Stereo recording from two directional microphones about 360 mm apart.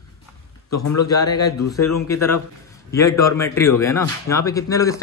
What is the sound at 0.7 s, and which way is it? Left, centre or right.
Speech, left.